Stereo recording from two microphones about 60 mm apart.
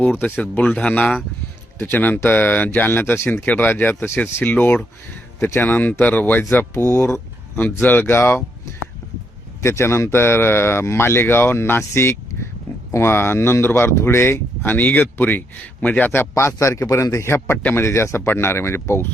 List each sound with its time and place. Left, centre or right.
0.0 s speech: left
8.0 s speech: left
9.6 s speech: left
16.3 s speech: left